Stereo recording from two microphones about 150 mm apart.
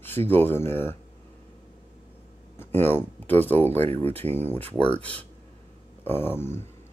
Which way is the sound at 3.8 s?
40° right (ahead or behind).